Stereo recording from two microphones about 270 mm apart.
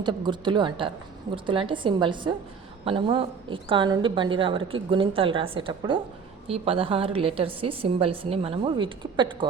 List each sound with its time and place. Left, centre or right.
0.0 s a woman's voice: centre